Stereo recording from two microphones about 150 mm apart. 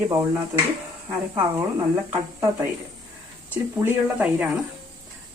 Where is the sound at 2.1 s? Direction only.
15° right (ahead or behind).